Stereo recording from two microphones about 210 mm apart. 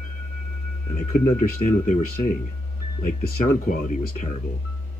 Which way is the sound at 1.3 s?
35° left (ahead or behind).